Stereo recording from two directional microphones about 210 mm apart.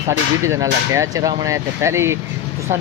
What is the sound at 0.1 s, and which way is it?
Speech, 15° right (ahead or behind).